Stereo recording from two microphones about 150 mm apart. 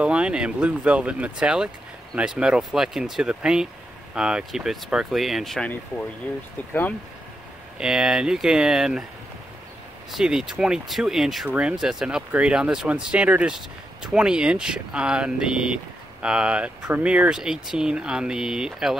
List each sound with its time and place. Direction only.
0.0 s speech: 10° right (ahead or behind)
6.7 s speech: 10° left (ahead or behind)
7.8 s speech: 5° right (ahead or behind)
10.1 s speech: 5° right (ahead or behind)